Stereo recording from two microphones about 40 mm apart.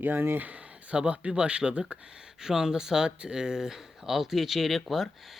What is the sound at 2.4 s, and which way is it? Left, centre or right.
Speech, centre.